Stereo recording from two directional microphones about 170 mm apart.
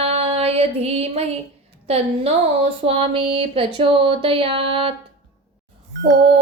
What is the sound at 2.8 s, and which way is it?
A woman's voice, 35° right (ahead or behind).